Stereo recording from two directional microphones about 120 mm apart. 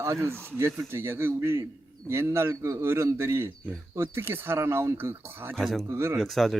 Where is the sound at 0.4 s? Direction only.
20° right (ahead or behind).